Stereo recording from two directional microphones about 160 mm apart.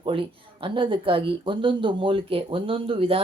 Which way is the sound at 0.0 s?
30° right (ahead or behind).